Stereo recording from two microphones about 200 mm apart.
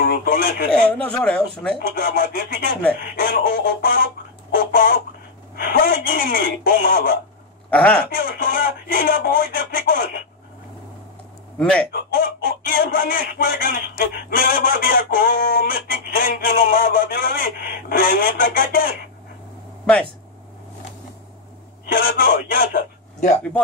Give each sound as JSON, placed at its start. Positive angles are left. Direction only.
{"t": 0.0, "sound": "speech", "side_deg": 50}
{"t": 1.1, "sound": "speech", "side_deg": 5}
{"t": 1.8, "sound": "speech", "side_deg": 50}
{"t": 7.7, "sound": "speech", "side_deg": 5}
{"t": 8.2, "sound": "speech", "side_deg": 45}
{"t": 11.5, "sound": "speech", "side_deg": 5}
{"t": 11.9, "sound": "speech", "side_deg": 45}
{"t": 21.8, "sound": "speech", "side_deg": 45}